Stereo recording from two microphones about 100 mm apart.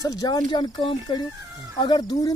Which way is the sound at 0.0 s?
40° left (ahead or behind).